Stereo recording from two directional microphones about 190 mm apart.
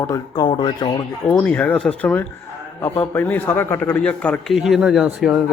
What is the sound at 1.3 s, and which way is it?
Speech, 10° left (ahead or behind).